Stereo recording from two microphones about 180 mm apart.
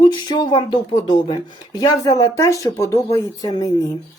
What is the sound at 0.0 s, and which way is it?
Speech, 25° left (ahead or behind).